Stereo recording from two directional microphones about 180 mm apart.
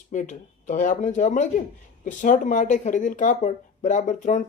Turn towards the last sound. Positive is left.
turn(degrees=45)  # may be behind; listen again after turning